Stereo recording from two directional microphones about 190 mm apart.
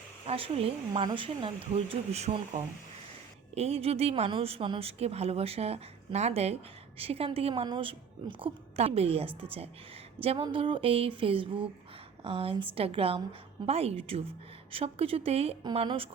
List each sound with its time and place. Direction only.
0.3 s a woman's voice: 30° right (ahead or behind)